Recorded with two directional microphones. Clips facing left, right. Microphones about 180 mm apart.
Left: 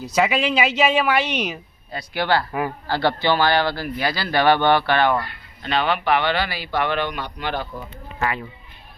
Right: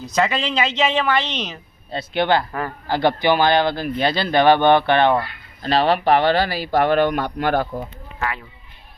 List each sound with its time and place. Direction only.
0.0 s speech: 10° left (ahead or behind)
1.9 s speech: 25° right (ahead or behind)
2.5 s speech: 10° left (ahead or behind)
2.8 s speech: 20° right (ahead or behind)
5.6 s speech: 35° right (ahead or behind)